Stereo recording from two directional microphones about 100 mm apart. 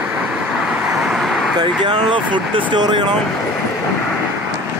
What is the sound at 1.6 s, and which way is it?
Speech, 55° right (ahead or behind).